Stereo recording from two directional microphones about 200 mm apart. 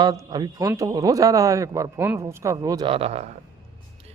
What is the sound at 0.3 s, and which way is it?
A man's voice, 20° right (ahead or behind).